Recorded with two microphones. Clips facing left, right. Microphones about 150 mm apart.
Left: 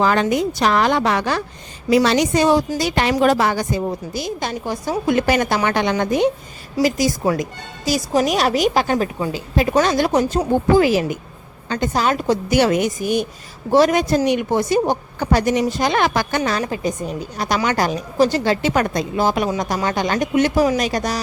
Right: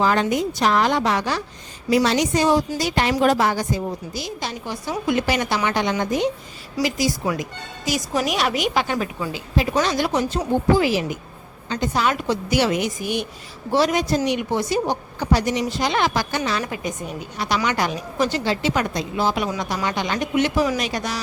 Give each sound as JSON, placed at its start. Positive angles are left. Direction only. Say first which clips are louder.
{"t": 0.0, "sound": "a woman's voice", "louder": "left 3 dB", "side_deg": 70}
{"t": 1.9, "sound": "a woman's voice", "louder": "left 3 dB", "side_deg": 70}
{"t": 5.6, "sound": "a woman's voice", "louder": "left 3 dB", "side_deg": 60}
{"t": 6.8, "sound": "a woman's voice", "louder": "left 4 dB", "side_deg": 45}
{"t": 16.6, "sound": "a woman's voice", "louder": "left 5 dB", "side_deg": 35}